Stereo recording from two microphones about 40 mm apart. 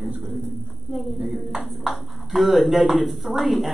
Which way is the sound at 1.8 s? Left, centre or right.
Centre.